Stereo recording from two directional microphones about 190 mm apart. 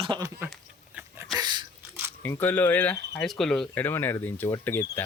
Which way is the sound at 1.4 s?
25° right (ahead or behind).